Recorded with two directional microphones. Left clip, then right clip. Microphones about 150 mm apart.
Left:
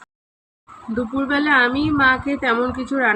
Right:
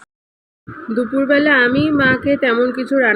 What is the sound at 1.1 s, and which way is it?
A woman's voice, 25° right (ahead or behind).